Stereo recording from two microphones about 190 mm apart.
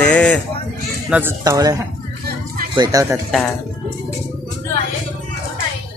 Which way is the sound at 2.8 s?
20° right (ahead or behind).